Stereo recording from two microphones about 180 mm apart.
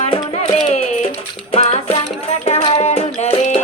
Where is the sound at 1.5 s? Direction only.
35° left (ahead or behind).